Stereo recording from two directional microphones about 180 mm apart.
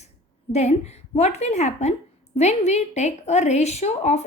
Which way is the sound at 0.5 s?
40° left (ahead or behind).